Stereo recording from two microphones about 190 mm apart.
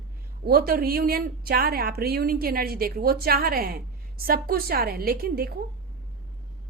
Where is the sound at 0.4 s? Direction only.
50° right (ahead or behind).